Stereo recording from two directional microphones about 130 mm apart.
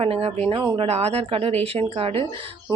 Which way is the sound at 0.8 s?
50° right (ahead or behind).